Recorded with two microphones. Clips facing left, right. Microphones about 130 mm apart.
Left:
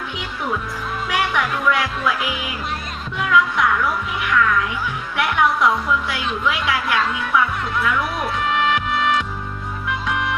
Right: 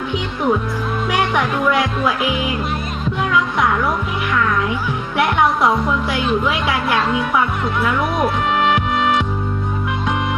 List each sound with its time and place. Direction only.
1.3 s speech: 25° right (ahead or behind)
3.2 s speech: 30° right (ahead or behind)